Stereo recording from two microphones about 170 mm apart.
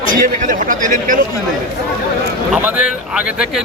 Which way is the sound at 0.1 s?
55° right (ahead or behind).